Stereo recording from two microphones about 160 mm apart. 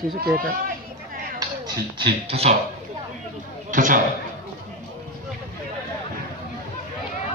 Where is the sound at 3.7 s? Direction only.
55° right (ahead or behind).